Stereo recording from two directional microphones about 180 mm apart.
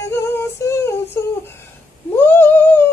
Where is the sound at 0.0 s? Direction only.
15° left (ahead or behind).